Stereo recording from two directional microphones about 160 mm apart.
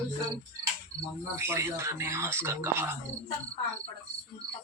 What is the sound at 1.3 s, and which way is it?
Speech, 15° right (ahead or behind).